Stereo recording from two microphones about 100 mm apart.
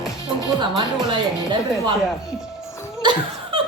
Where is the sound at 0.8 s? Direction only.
45° right (ahead or behind).